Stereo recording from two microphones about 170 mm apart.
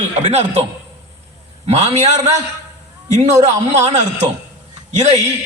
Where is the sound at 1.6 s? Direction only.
40° right (ahead or behind).